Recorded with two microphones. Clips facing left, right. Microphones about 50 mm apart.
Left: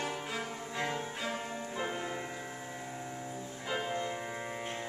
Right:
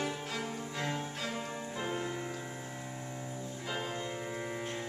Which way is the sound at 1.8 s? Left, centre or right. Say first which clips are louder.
Even; centre.